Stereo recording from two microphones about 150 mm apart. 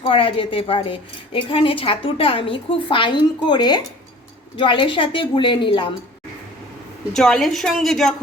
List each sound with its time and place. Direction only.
0.0 s speech: 35° left (ahead or behind)
7.1 s a woman's voice: 5° left (ahead or behind)